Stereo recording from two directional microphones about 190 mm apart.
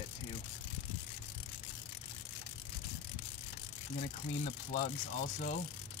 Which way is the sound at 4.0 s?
35° left (ahead or behind).